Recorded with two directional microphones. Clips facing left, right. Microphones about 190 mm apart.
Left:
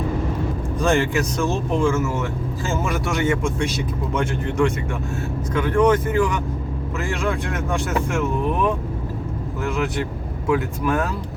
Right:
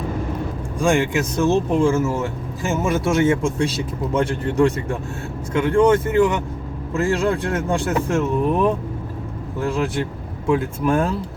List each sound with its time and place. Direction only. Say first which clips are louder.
0.8 s a man's voice: right 1 dB; 15° right (ahead or behind)
1.4 s speech: right 6 dB; 30° right (ahead or behind)
9.6 s speech: right 2 dB; 30° right (ahead or behind)